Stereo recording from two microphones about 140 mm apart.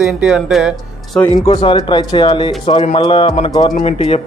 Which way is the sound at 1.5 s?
35° left (ahead or behind).